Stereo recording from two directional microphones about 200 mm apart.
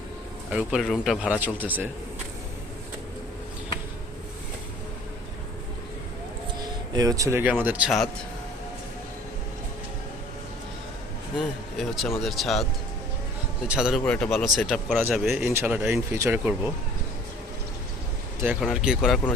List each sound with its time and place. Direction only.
0.5 s speech: centre (ahead or behind)
6.9 s speech: 15° right (ahead or behind); by 8.1 s centre (ahead or behind)
11.3 s speech: centre (ahead or behind)
13.7 s speech: 5° right (ahead or behind)
14.0 s speech: 5° left (ahead or behind); by 16.7 s 10° right (ahead or behind)
18.6 s speech: centre (ahead or behind)